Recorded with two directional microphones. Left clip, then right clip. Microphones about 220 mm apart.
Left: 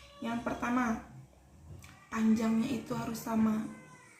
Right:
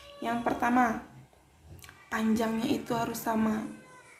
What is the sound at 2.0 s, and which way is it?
A woman's voice, 45° right (ahead or behind).